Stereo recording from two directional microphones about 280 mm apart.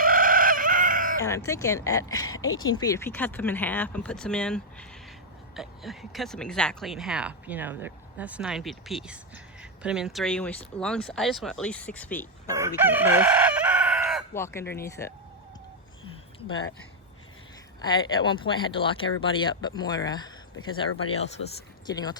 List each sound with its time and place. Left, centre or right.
0.0 s chicken: right
1.2 s speech: centre
2.3 s speech: left
2.7 s speech: centre
12.5 s chicken: centre
14.3 s speech: centre
17.7 s speech: centre
21.8 s speech: centre